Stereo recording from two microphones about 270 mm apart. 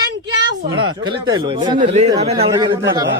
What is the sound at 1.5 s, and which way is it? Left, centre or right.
Speech, centre.